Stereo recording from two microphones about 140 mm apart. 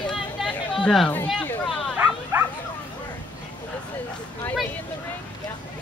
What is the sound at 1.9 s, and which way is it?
Bow-wow, 10° right (ahead or behind).